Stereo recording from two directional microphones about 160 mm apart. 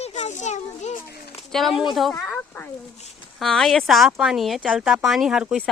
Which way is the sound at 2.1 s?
10° left (ahead or behind).